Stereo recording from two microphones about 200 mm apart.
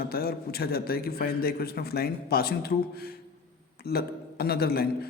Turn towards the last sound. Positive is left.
turn(degrees=50)  # may be behind; listen again after turning